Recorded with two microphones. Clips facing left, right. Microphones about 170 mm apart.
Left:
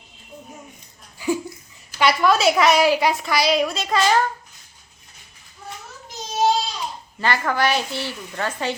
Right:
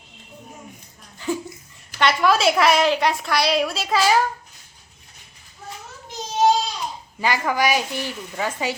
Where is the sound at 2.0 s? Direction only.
Centre (ahead or behind).